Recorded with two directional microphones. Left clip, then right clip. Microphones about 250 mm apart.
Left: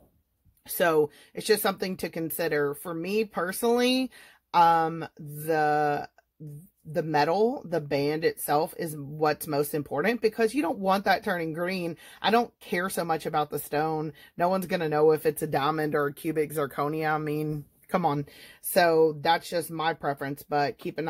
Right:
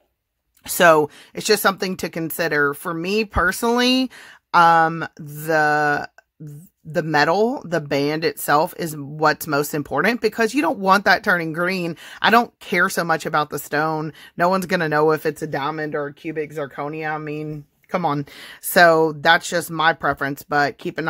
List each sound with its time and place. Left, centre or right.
0.7 s speech: right
15.3 s speech: centre
15.7 s speech: centre
17.9 s speech: centre
18.2 s speech: right